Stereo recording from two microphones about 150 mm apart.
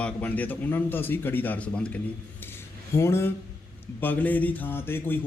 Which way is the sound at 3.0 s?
15° left (ahead or behind).